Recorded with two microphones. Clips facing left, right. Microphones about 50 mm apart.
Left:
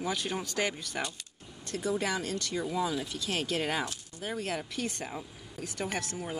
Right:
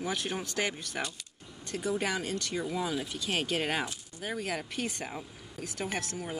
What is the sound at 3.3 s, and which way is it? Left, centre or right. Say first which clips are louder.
Speech: right 1 dB; right.